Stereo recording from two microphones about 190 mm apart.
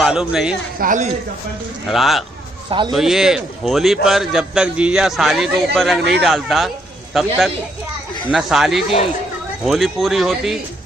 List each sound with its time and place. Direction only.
0.0 s a man's voice: 5° right (ahead or behind)
0.7 s speech: 40° right (ahead or behind)
1.9 s a man's voice: centre (ahead or behind)